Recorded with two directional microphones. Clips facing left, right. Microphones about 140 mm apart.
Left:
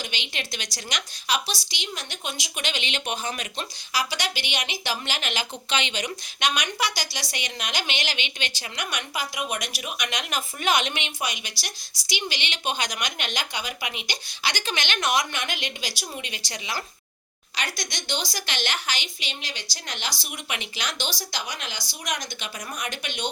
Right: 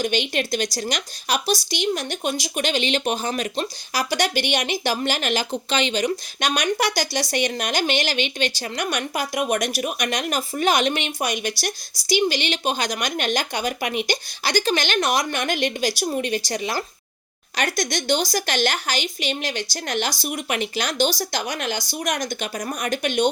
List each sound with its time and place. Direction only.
0.0 s a woman's voice: 45° right (ahead or behind)